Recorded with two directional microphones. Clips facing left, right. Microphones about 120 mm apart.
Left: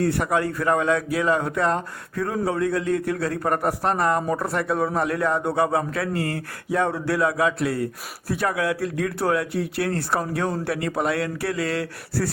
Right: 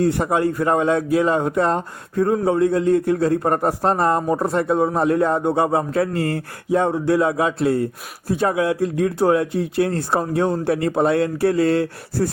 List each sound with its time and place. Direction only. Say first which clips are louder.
0.0 s speech: right 4 dB; 20° right (ahead or behind)